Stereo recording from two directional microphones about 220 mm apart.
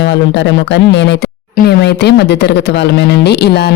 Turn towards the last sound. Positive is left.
turn(degrees=50)  # may be behind; listen again after turning